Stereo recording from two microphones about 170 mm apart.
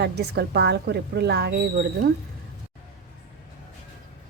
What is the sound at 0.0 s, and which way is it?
Speech, 75° right (ahead or behind).